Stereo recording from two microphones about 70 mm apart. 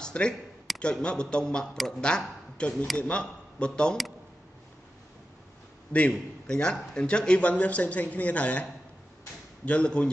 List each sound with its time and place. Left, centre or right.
0.0 s speech: centre
0.7 s a sound: centre
1.0 s speech: centre
5.9 s a man's voice: centre
9.7 s speech: centre